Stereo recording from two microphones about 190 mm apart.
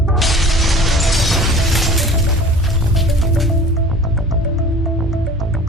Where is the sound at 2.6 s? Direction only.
Centre (ahead or behind).